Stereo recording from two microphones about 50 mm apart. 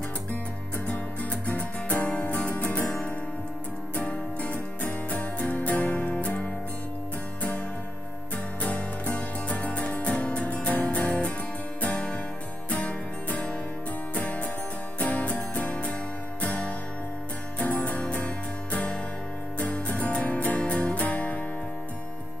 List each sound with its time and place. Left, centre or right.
1.4 s music: left
3.9 s music: left
8.5 s music: left